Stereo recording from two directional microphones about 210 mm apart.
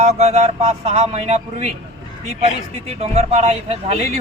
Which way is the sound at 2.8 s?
30° right (ahead or behind).